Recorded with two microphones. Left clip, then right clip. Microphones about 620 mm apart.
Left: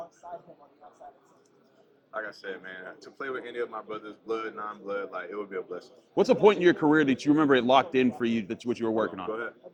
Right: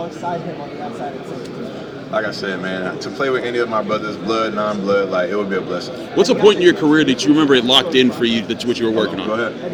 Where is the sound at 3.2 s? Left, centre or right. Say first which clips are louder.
Right 15 dB; right.